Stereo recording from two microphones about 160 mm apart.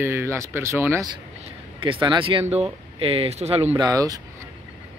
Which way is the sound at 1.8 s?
30° right (ahead or behind).